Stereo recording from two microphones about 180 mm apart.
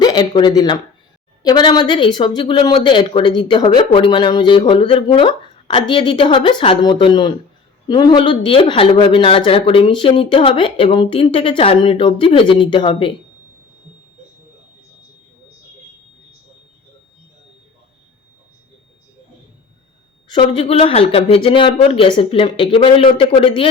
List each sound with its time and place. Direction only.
0.0 s speech: 25° left (ahead or behind)
20.5 s speech: 30° left (ahead or behind)